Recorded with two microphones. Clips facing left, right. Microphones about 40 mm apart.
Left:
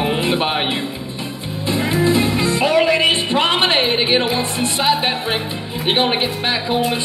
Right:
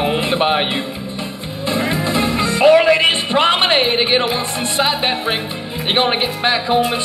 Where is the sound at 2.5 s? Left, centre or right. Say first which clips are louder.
Right 6 dB; centre.